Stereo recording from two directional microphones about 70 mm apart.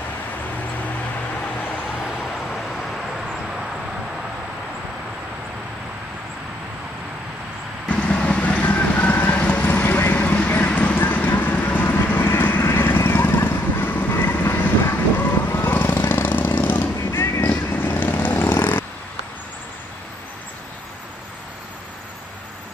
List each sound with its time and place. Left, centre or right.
2.0 s vehicle: centre
7.9 s vehicle: centre
10.2 s vehicle: left
17.0 s a sound: left
17.5 s vehicle: left
18.5 s a sound: left